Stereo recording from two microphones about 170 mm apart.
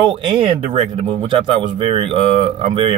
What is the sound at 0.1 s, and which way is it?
Speech, 30° right (ahead or behind).